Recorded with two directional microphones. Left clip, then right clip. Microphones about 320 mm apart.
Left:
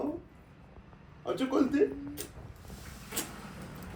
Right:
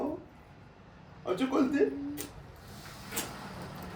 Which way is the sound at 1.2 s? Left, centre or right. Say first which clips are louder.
Right 1 dB; centre.